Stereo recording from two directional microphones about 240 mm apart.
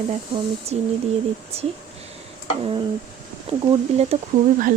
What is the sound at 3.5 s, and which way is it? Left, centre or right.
Speech, right.